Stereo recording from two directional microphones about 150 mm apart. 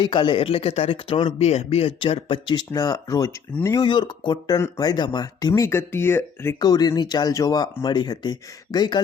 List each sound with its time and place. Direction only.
0.0 s speech: 30° left (ahead or behind)